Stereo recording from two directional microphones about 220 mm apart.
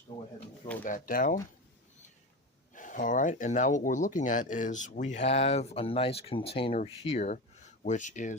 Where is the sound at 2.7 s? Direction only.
35° left (ahead or behind).